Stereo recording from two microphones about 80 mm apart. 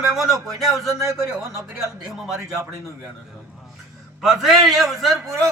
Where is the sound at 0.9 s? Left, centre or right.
Right.